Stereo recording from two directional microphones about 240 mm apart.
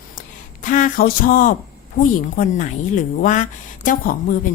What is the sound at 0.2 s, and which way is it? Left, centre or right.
A woman's voice, left.